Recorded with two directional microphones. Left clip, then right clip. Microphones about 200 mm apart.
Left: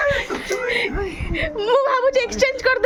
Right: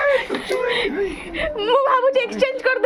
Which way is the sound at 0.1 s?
10° left (ahead or behind).